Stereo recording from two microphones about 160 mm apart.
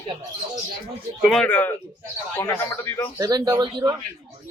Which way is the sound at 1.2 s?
Centre (ahead or behind).